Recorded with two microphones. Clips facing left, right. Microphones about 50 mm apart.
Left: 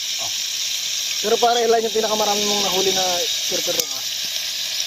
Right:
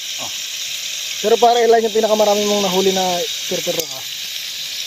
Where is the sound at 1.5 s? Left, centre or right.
Right.